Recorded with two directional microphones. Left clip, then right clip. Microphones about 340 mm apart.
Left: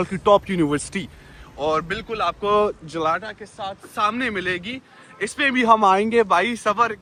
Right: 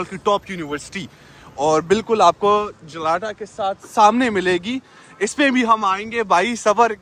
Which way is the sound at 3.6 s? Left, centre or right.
Right.